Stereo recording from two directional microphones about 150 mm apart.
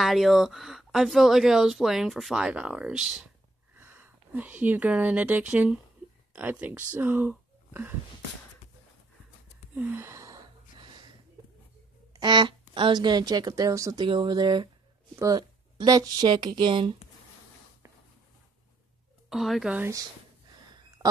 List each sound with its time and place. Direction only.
0.0 s speech: centre (ahead or behind)
9.8 s gasp: 15° right (ahead or behind)
12.1 s speech: 30° right (ahead or behind)
19.2 s speech: centre (ahead or behind)
21.0 s owl: 20° right (ahead or behind)